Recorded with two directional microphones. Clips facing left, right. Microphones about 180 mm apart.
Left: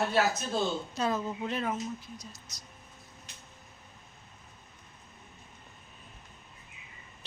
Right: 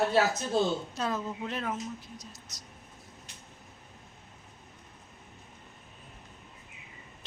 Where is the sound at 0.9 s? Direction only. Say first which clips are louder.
Left 2 dB; centre (ahead or behind).